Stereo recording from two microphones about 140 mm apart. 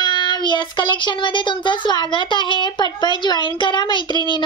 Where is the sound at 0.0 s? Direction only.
35° left (ahead or behind).